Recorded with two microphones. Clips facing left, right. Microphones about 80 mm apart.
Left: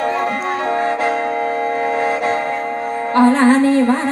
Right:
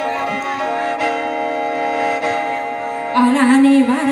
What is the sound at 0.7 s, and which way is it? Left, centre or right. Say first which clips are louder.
Music: left 2 dB; left.